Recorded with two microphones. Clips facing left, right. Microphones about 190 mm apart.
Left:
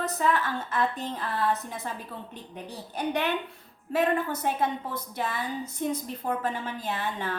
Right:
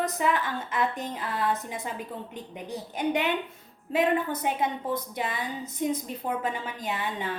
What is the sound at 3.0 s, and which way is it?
A woman's voice, 15° right (ahead or behind).